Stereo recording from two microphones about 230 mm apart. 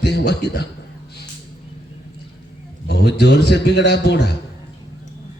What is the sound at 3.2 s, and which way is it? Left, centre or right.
A man's voice, left.